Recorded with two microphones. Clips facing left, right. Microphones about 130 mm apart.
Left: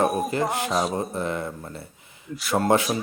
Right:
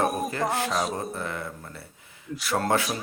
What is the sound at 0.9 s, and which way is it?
Speech, 20° left (ahead or behind).